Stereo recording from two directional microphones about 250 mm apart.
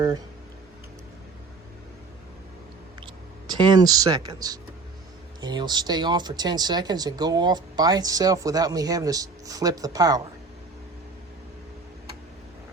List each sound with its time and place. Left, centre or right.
3.4 s speech: centre